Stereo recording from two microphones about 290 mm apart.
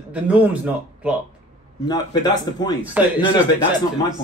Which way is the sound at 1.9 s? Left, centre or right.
Centre.